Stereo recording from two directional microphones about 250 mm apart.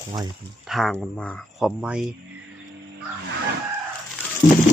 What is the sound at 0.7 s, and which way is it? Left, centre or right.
Speech, centre.